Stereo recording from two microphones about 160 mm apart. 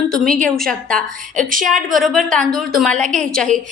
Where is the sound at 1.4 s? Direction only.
60° right (ahead or behind).